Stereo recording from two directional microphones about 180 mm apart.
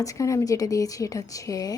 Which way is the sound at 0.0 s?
20° left (ahead or behind).